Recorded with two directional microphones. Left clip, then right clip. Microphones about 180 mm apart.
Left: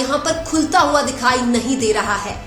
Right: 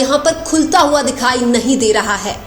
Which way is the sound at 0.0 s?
30° right (ahead or behind).